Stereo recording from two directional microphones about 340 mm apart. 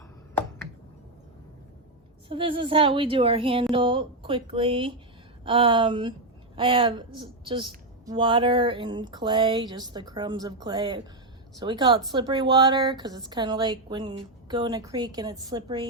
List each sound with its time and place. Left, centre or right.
2.3 s a woman's voice: centre